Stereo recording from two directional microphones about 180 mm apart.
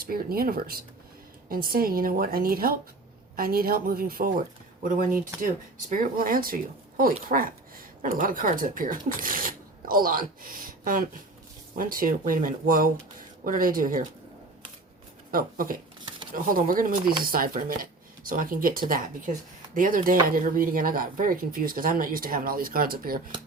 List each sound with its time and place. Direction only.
0.0 s a woman's voice: 55° right (ahead or behind)
15.3 s speech: 50° right (ahead or behind)